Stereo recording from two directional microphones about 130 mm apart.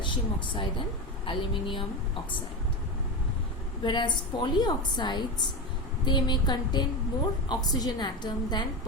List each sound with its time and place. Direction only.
0.0 s a woman's voice: 35° left (ahead or behind)
3.8 s a woman's voice: 35° left (ahead or behind)